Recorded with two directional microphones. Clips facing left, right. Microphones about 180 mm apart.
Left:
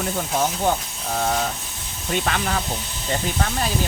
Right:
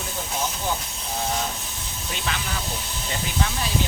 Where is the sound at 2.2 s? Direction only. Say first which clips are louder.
Left 3 dB; 55° left (ahead or behind).